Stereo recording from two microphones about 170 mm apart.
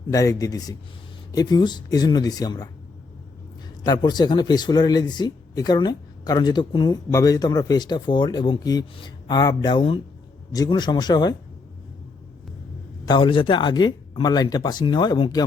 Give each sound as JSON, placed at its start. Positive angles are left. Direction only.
{"t": 0.1, "sound": "speech", "side_deg": 20}
{"t": 3.8, "sound": "speech", "side_deg": 25}
{"t": 13.1, "sound": "speech", "side_deg": 30}